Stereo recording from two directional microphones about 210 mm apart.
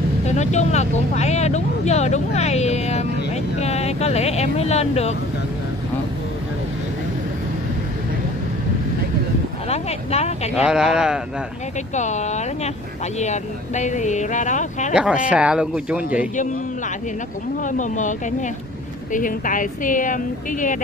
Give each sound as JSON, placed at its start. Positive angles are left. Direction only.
{"t": 0.3, "sound": "speech", "side_deg": 35}
{"t": 9.7, "sound": "speech", "side_deg": 30}
{"t": 10.5, "sound": "speech", "side_deg": -5}
{"t": 11.9, "sound": "speech", "side_deg": 35}
{"t": 15.0, "sound": "speech", "side_deg": -5}
{"t": 17.6, "sound": "speech", "side_deg": 35}
{"t": 19.1, "sound": "speech", "side_deg": 40}